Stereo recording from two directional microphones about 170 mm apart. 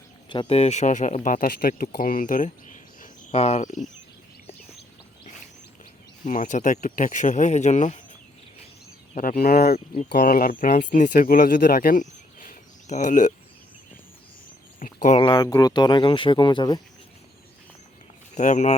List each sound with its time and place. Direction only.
0.3 s speech: 30° left (ahead or behind)
6.2 s speech: 45° left (ahead or behind)
9.1 s speech: 60° left (ahead or behind)
14.8 s a sound: 50° left (ahead or behind)
15.2 s speech: 25° left (ahead or behind)
18.3 s speech: 45° left (ahead or behind)